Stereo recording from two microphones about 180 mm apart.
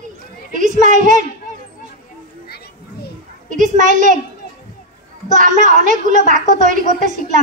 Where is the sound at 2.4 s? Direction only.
60° left (ahead or behind).